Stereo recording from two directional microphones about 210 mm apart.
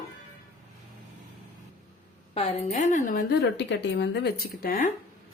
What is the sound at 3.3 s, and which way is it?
Speech, 55° left (ahead or behind).